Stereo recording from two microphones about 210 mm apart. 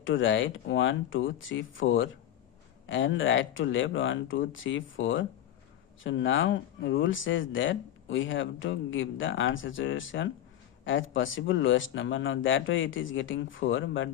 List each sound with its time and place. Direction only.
0.0 s speech: 65° left (ahead or behind)